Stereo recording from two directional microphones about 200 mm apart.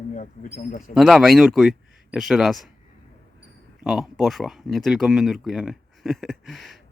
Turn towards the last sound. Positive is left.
turn(degrees=0)  # may be behind; listen again after turning